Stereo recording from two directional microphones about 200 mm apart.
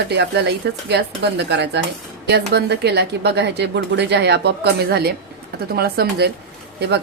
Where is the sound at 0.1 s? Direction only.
55° right (ahead or behind).